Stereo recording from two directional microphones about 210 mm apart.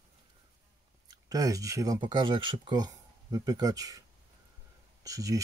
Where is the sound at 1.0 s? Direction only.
15° right (ahead or behind).